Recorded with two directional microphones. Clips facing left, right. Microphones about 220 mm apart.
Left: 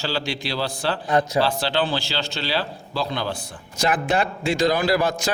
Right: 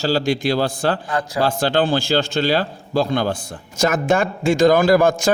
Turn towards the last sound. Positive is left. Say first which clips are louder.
# right 6 dB
turn(degrees=-50)  # may be behind; listen again after turning